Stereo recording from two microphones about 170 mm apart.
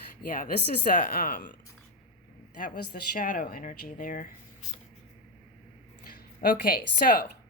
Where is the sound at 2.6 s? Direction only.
55° left (ahead or behind).